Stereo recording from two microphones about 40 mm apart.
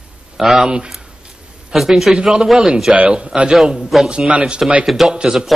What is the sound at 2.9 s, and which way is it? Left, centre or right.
Speech, right.